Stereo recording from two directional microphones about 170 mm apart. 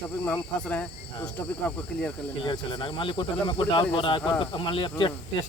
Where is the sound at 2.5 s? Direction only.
30° left (ahead or behind).